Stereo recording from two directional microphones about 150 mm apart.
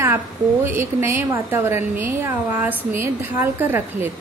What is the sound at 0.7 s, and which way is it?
A woman's voice, 15° right (ahead or behind).